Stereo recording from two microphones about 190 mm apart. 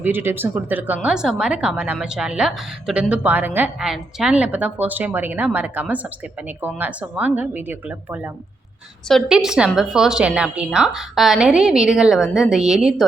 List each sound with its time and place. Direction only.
0.0 s a woman's voice: 10° right (ahead or behind)